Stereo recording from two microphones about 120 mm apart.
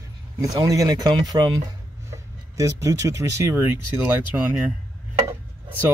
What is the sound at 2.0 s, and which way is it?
Speech, 25° right (ahead or behind).